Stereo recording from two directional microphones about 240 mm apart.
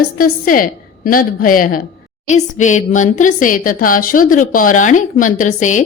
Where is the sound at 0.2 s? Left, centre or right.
Left.